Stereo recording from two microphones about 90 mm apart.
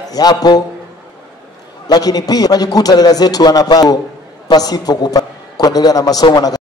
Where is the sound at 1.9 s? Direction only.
45° left (ahead or behind).